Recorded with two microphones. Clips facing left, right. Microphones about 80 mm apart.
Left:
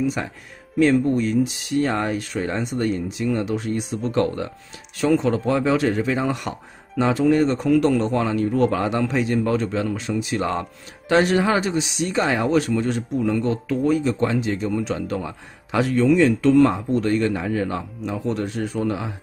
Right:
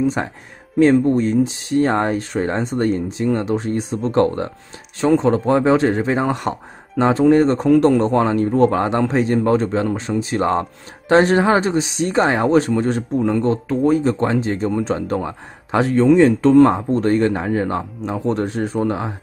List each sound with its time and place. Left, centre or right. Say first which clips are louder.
0.0 s speech: right 4 dB; right